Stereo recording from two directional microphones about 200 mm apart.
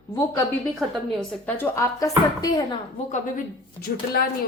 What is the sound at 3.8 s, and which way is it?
Speech, 50° left (ahead or behind).